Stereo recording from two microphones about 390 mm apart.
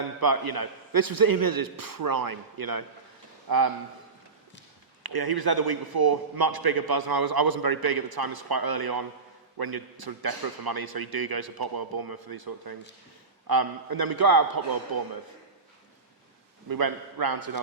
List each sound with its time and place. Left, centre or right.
0.2 s a man's voice: right
5.0 s a man's voice: right
16.6 s a man's voice: right